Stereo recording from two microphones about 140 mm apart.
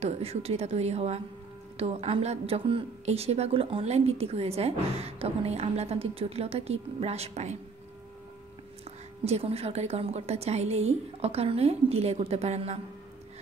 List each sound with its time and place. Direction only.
0.0 s a woman's voice: 50° right (ahead or behind)
8.8 s a woman's voice: 45° right (ahead or behind)